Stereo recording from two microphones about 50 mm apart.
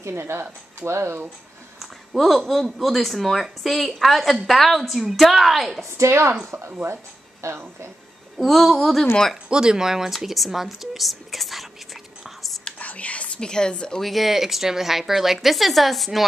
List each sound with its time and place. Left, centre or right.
0.0 s speech: right
1.8 s a sound: centre
2.6 s a woman's voice: centre
5.9 s speech: right
7.4 s speech: right
8.4 s a woman's voice: centre
9.5 s speech: centre
12.7 s whispering: left
13.4 s a woman's voice: centre
14.0 s a woman's voice: centre